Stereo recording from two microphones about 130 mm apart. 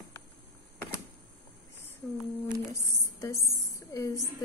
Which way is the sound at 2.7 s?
25° left (ahead or behind).